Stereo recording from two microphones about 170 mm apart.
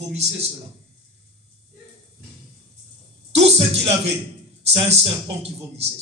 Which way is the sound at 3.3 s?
35° right (ahead or behind).